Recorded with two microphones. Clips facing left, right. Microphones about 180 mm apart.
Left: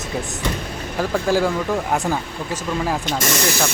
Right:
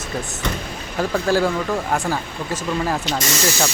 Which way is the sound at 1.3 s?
10° left (ahead or behind).